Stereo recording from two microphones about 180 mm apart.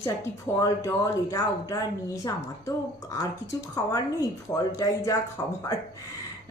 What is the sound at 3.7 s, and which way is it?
A woman's voice, 20° left (ahead or behind).